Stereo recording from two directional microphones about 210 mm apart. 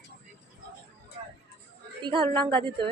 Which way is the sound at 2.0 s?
25° right (ahead or behind).